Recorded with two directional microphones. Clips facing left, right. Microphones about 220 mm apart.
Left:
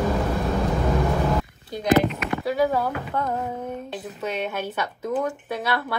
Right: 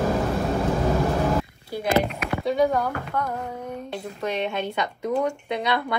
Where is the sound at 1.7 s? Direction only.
5° right (ahead or behind).